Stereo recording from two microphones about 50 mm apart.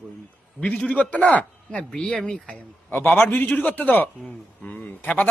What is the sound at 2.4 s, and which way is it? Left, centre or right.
A man's voice, left.